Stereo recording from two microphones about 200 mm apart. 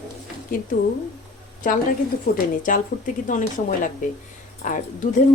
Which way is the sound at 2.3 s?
45° left (ahead or behind).